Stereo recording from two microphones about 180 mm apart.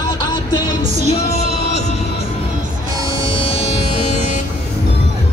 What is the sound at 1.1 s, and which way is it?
Music, 40° left (ahead or behind).